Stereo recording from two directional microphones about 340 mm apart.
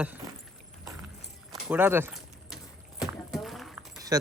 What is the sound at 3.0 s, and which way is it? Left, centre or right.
Horse, centre.